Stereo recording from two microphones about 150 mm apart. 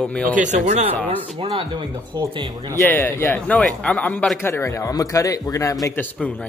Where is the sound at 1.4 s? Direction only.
35° right (ahead or behind).